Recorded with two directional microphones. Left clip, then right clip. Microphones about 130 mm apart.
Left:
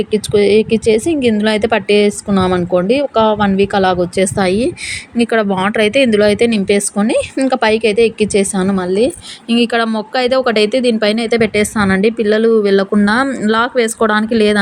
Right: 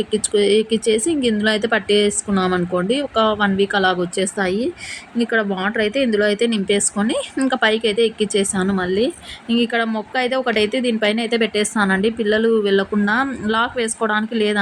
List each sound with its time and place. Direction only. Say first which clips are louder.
0.0 s speech: left 5 dB; 25° left (ahead or behind)
9.6 s speech: left 5 dB; 35° left (ahead or behind)